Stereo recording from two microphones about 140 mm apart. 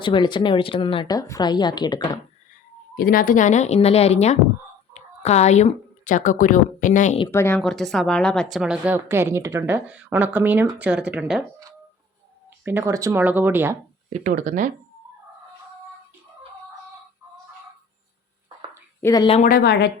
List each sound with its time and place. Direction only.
0.0 s speech: 35° left (ahead or behind)
2.9 s speech: 90° left; by 7.2 s 65° left (ahead or behind)
7.3 s speech: 20° left (ahead or behind)
7.6 s a woman's voice: 5° left (ahead or behind)
12.6 s a woman's voice: 15° right (ahead or behind)
14.1 s speech: 65° right (ahead or behind)
19.0 s speech: 30° left (ahead or behind)
19.4 s a woman's voice: 90° left